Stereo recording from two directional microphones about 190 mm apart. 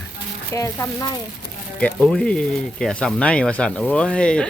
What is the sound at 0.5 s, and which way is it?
Speech, 15° left (ahead or behind).